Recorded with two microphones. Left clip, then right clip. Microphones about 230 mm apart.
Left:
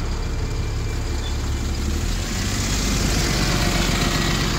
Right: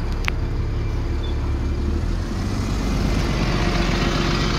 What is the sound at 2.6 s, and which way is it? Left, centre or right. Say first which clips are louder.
Vehicle: left 3 dB; left.